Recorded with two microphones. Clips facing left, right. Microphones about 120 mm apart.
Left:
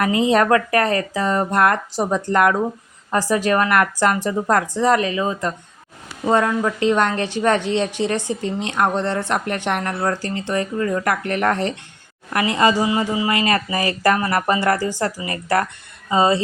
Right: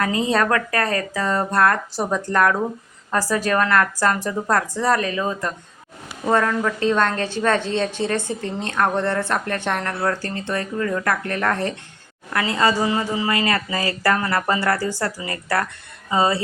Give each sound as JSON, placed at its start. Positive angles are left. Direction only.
{"t": 0.0, "sound": "a woman's voice", "side_deg": 20}